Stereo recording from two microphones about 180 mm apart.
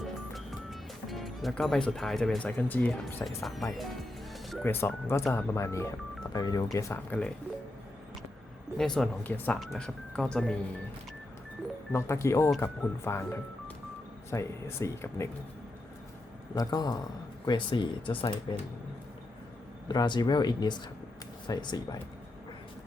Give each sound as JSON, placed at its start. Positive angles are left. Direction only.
{"t": 0.0, "sound": "music", "side_deg": 0}
{"t": 3.2, "sound": "speech", "side_deg": 0}
{"t": 4.6, "sound": "speech", "side_deg": 10}
{"t": 8.8, "sound": "speech", "side_deg": 5}
{"t": 11.9, "sound": "speech", "side_deg": 15}
{"t": 16.6, "sound": "speech", "side_deg": 20}
{"t": 19.9, "sound": "speech", "side_deg": 25}